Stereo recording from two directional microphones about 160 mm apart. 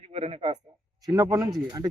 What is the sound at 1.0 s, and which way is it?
Speech, 20° right (ahead or behind).